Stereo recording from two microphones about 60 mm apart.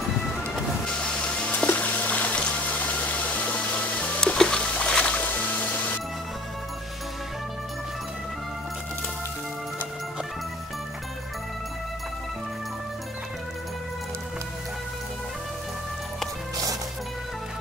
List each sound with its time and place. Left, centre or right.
0.8 s water: centre
4.2 s music: centre; by 5.9 s left